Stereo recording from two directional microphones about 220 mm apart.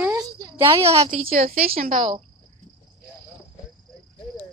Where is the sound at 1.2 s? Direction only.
40° right (ahead or behind).